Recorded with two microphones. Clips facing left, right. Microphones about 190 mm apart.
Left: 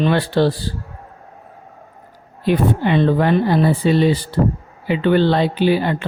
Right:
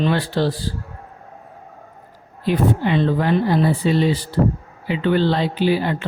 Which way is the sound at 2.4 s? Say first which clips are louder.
Left 2 dB; 60° left (ahead or behind).